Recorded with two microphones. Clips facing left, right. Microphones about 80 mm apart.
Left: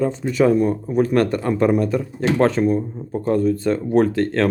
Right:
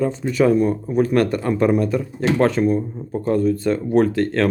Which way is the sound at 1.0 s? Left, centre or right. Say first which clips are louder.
Even; left.